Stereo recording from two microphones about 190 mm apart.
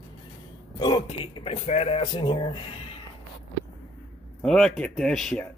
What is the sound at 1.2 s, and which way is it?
Speech, 25° left (ahead or behind).